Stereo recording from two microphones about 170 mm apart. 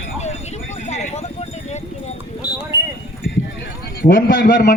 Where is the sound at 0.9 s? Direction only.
40° left (ahead or behind).